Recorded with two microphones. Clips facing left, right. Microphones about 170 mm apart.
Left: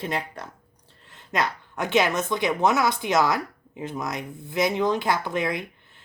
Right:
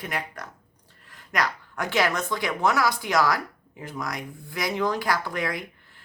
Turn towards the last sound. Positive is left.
turn(degrees=20)  # may be behind; listen again after turning